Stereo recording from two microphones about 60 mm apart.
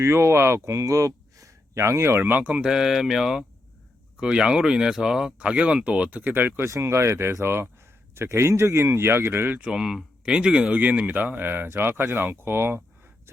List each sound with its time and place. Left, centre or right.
0.0 s speech: right
2.5 s speech: centre
4.2 s speech: centre; by 6.7 s right
6.7 s speech: right
9.7 s speech: centre
10.2 s speech: centre
10.7 s speech: right